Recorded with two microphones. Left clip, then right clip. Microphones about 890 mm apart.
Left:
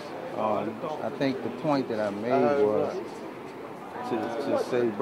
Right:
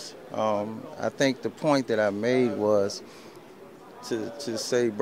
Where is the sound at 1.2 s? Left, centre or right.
Right.